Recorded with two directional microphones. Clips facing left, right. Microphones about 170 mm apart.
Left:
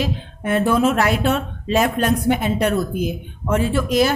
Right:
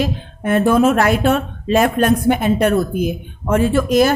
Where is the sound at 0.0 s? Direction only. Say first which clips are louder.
Right 3 dB; 50° right (ahead or behind).